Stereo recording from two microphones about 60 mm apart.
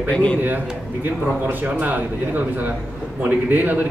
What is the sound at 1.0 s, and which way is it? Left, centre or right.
A man's voice, right.